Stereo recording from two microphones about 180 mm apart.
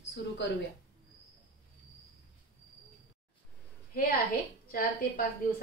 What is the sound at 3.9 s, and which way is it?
A woman's voice, 55° left (ahead or behind).